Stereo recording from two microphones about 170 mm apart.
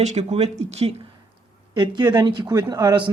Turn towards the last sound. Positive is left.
turn(degrees=-25)  # may be behind; listen again after turning